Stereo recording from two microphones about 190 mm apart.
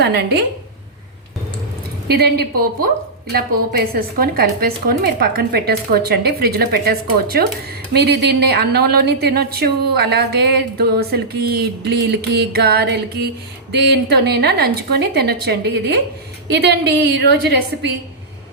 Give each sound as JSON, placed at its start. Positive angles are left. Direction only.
{"t": 2.0, "sound": "a woman's voice", "side_deg": -55}